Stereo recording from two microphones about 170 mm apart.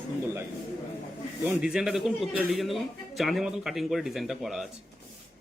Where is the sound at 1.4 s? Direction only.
5° right (ahead or behind).